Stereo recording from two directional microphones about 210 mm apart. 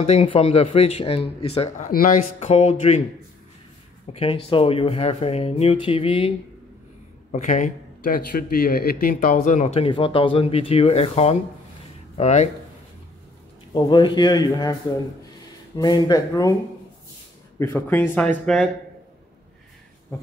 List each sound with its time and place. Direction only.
0.0 s speech: 30° left (ahead or behind)
1.9 s speech: 40° left (ahead or behind)
4.1 s speech: 25° left (ahead or behind)
7.3 s speech: 35° left (ahead or behind)
13.7 s speech: 20° left (ahead or behind)
17.6 s speech: 10° left (ahead or behind)
20.1 s speech: 10° left (ahead or behind)